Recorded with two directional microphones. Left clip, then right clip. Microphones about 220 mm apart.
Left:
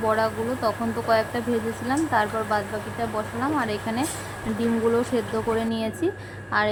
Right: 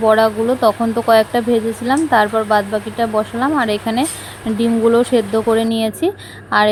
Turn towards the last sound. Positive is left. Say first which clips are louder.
# right 9 dB
turn(degrees=-30)  # may be behind; listen again after turning